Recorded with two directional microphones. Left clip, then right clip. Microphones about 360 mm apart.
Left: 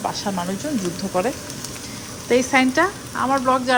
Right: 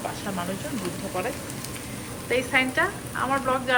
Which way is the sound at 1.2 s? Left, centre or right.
Centre.